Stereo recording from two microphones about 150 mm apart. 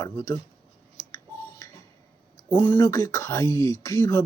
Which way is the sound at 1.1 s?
25° left (ahead or behind).